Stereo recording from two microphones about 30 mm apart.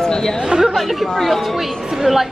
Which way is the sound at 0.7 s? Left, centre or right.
Centre.